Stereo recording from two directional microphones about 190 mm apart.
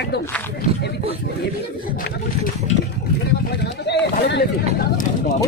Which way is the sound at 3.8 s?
65° left (ahead or behind).